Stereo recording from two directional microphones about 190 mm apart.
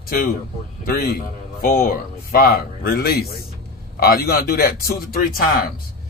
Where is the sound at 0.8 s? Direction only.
50° left (ahead or behind).